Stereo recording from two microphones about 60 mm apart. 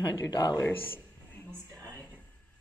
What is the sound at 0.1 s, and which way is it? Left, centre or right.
Speech, left.